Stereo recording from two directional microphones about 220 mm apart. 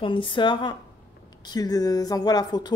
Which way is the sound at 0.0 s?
25° left (ahead or behind).